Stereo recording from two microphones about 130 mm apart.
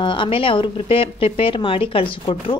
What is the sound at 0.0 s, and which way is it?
A woman's voice, 40° left (ahead or behind).